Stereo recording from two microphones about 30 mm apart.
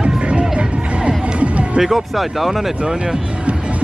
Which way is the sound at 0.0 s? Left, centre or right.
Right.